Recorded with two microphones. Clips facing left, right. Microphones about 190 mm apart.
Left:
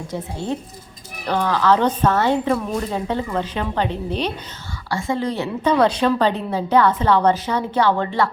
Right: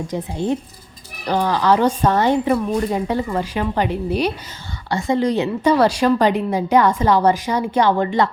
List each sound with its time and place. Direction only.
0.1 s a woman's voice: 20° right (ahead or behind)